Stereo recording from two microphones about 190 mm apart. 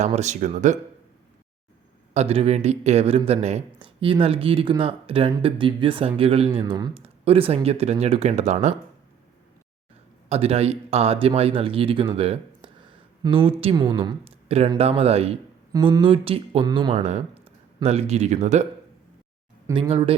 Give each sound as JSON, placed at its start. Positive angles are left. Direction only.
{"t": 0.0, "sound": "speech", "side_deg": -35}
{"t": 2.1, "sound": "speech", "side_deg": -30}
{"t": 10.2, "sound": "a woman's voice", "side_deg": -35}
{"t": 19.6, "sound": "speech", "side_deg": -15}
{"t": 19.9, "sound": "a woman's voice", "side_deg": -30}